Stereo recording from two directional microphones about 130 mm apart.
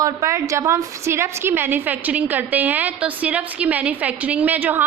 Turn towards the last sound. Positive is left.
turn(degrees=-15)  # may be behind; listen again after turning